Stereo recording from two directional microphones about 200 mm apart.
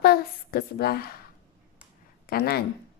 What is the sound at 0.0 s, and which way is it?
A woman's voice, 50° left (ahead or behind).